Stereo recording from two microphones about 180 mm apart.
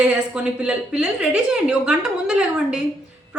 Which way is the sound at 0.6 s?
5° right (ahead or behind).